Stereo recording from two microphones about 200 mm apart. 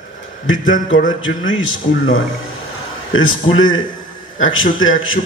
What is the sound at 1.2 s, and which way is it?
A man's voice, 80° left.